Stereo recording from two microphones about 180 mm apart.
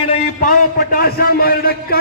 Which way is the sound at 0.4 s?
50° left (ahead or behind).